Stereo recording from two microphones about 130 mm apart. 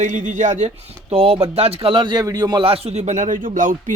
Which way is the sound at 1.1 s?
45° right (ahead or behind).